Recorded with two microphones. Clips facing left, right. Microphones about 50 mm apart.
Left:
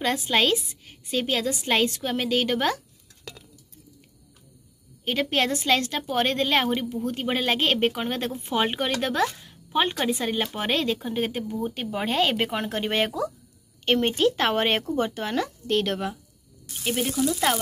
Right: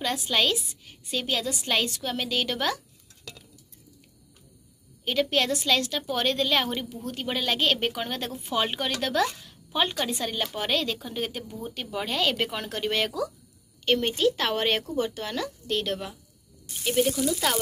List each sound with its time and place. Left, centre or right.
0.0 s a woman's voice: left
5.0 s a woman's voice: left
16.8 s sizzle: centre
17.3 s speech: left